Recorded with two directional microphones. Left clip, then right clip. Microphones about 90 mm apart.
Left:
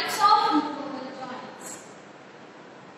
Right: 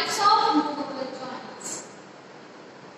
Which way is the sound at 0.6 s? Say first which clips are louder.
Right 2 dB; 35° right (ahead or behind).